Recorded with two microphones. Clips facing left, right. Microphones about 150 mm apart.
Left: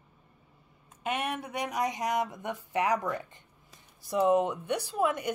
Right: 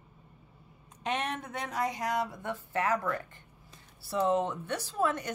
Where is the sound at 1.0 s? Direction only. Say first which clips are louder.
Left 1 dB; 10° left (ahead or behind).